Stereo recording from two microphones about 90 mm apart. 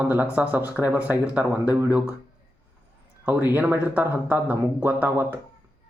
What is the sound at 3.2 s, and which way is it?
Speech, 20° right (ahead or behind).